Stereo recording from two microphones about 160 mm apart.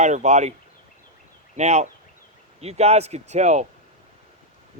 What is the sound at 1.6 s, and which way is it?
Speech, 45° right (ahead or behind).